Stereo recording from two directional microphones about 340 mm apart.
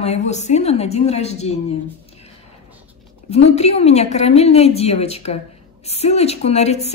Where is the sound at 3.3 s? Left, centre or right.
Centre.